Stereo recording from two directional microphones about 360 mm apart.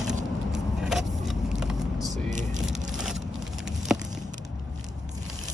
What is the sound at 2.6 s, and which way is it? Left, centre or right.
Vehicle, centre.